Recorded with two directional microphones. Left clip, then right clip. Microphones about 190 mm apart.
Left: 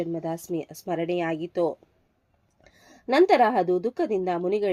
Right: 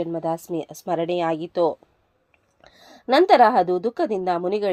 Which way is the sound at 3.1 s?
15° right (ahead or behind).